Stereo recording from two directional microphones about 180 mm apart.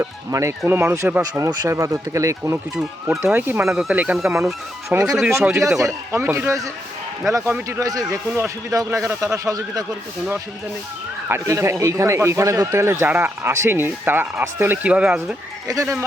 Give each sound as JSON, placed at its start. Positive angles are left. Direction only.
{"t": 0.0, "sound": "a man's voice", "side_deg": -15}
{"t": 2.7, "sound": "a man's voice", "side_deg": 0}
{"t": 11.3, "sound": "a man's voice", "side_deg": -15}
{"t": 15.6, "sound": "a man's voice", "side_deg": -20}